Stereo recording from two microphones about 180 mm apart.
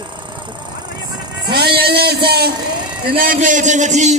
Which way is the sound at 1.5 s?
60° right (ahead or behind).